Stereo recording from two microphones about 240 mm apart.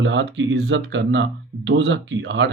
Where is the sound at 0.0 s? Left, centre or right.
Right.